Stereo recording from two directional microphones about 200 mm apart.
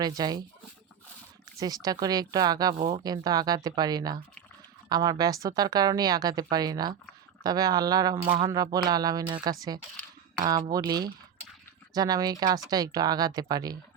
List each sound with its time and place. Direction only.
0.0 s speech: 20° right (ahead or behind)
1.5 s speech: 20° right (ahead or behind)